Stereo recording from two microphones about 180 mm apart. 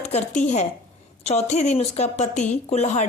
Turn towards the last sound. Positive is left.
turn(degrees=40)  # may be behind; listen again after turning